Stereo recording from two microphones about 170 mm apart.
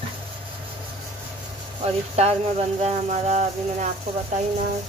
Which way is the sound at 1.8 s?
40° right (ahead or behind).